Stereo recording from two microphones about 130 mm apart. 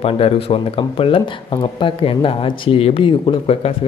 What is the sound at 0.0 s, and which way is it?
Speech, 45° left (ahead or behind).